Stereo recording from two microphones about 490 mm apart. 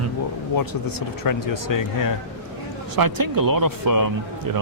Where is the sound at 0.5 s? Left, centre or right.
Left.